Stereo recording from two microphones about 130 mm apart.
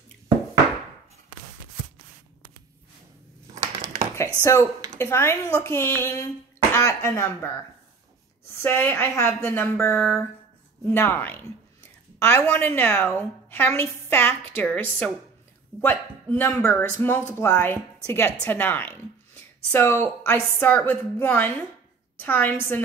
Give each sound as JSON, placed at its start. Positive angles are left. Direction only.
{"t": 4.4, "sound": "speech", "side_deg": 20}